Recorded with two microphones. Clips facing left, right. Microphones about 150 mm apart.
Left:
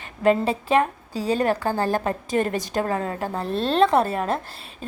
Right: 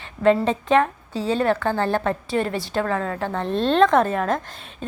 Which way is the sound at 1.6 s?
40° left (ahead or behind).